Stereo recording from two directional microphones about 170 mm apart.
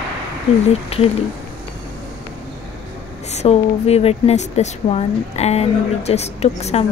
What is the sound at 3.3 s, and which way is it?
Speech, 40° left (ahead or behind).